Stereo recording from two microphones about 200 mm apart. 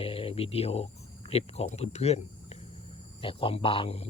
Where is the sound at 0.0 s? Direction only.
30° left (ahead or behind).